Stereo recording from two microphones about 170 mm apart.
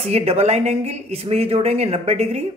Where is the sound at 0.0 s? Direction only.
35° right (ahead or behind).